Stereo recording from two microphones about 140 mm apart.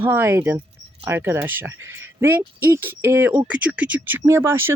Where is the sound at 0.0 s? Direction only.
15° right (ahead or behind).